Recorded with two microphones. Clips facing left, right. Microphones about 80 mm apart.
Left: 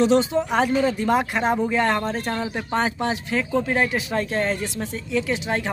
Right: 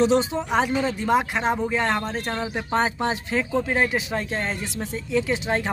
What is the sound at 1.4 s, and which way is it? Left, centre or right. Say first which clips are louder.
Speech: left 2 dB; centre.